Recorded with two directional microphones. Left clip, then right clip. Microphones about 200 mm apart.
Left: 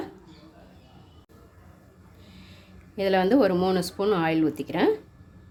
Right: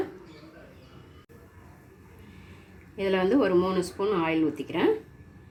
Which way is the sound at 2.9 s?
80° left.